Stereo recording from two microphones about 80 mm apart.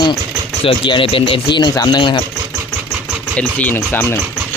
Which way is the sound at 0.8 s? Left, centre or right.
Left.